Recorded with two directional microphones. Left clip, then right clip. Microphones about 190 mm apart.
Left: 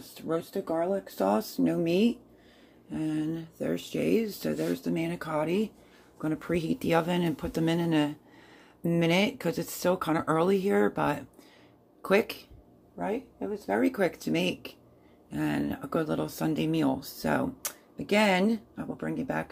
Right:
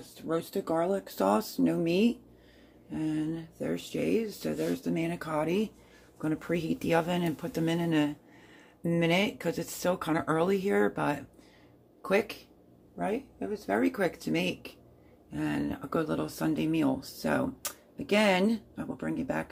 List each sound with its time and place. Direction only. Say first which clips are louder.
0.3 s speech: even; 5° right (ahead or behind); by 12.4 s 20° left (ahead or behind)
12.9 s speech: even; centre (ahead or behind)